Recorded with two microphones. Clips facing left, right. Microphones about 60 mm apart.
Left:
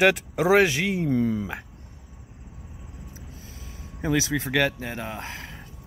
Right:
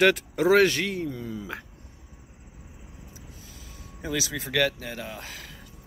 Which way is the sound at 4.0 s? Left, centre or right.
Left.